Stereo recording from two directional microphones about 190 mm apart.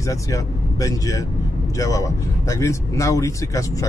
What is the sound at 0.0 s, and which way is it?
A man's voice, 15° left (ahead or behind).